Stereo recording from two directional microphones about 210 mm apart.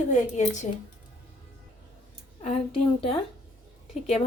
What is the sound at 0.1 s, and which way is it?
Speech, 35° left (ahead or behind).